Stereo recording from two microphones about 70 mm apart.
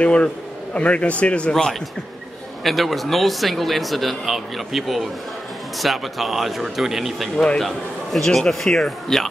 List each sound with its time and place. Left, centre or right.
0.0 s a man's voice: centre
1.5 s speech: centre